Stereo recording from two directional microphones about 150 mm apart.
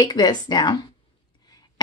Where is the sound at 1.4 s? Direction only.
25° left (ahead or behind).